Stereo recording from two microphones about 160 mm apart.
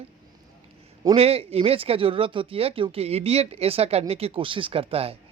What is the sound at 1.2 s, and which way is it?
Speech, 40° right (ahead or behind).